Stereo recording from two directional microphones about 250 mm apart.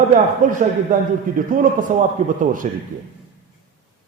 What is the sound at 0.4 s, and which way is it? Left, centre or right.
Speech, right.